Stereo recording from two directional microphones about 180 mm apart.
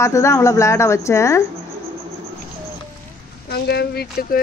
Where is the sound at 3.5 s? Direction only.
60° left (ahead or behind).